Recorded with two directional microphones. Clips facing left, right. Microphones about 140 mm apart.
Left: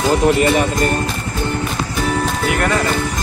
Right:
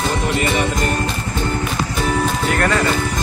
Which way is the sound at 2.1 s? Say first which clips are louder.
Even; centre (ahead or behind).